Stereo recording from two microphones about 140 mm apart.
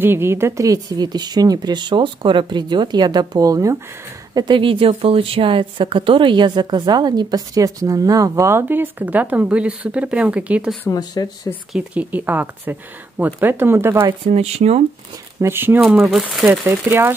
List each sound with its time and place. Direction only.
0.0 s a woman's voice: 15° right (ahead or behind)
10.9 s speech: 30° left (ahead or behind)
11.7 s speech: 10° right (ahead or behind)
14.2 s speech: 50° right (ahead or behind)
15.4 s speech: 15° right (ahead or behind)
16.1 s speech: centre (ahead or behind)
16.4 s speech: 15° right (ahead or behind)